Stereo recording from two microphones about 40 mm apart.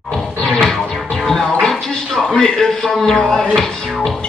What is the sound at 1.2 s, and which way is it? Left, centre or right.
Music, centre.